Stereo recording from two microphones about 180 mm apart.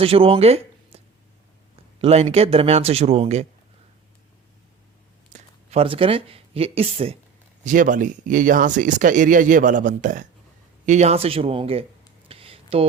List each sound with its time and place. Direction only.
0.0 s speech: 30° right (ahead or behind)
5.3 s speech: 35° right (ahead or behind)
7.6 s speech: 45° right (ahead or behind)
12.3 s a sound: 30° right (ahead or behind)